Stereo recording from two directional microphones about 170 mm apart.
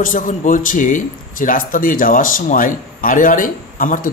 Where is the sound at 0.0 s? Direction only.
50° left (ahead or behind).